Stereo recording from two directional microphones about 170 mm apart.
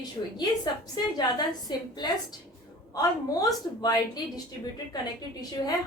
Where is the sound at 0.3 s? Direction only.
25° left (ahead or behind).